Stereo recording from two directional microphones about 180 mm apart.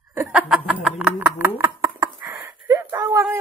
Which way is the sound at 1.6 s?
15° right (ahead or behind).